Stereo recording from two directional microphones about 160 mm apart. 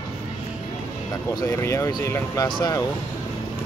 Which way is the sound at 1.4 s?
20° left (ahead or behind).